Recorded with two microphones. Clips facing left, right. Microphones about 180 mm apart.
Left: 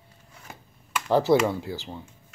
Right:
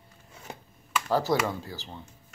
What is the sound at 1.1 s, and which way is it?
Speech, 20° left (ahead or behind).